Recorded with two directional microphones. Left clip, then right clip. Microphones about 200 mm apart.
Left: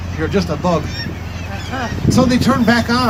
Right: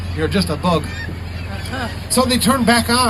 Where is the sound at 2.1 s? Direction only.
45° right (ahead or behind).